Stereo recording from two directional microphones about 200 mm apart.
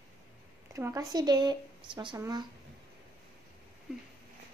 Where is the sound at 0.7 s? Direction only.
15° right (ahead or behind).